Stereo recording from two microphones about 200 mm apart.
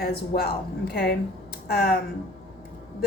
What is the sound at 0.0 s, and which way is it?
Speech, 50° left (ahead or behind).